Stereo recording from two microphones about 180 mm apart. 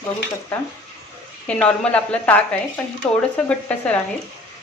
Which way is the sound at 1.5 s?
5° left (ahead or behind).